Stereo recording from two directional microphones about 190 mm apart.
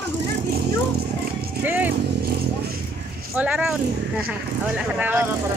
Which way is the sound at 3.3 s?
5° right (ahead or behind).